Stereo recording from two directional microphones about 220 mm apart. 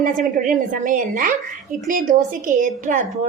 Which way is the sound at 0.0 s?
35° right (ahead or behind).